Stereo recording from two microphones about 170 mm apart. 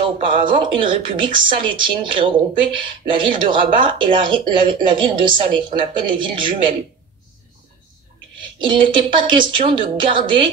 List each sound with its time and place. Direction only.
0.5 s speech: 30° right (ahead or behind)
8.4 s speech: 30° right (ahead or behind)